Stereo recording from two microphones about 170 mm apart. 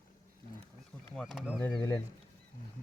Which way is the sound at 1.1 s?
Centre (ahead or behind).